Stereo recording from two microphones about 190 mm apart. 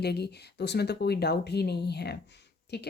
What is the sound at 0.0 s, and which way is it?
Speech, 60° left (ahead or behind).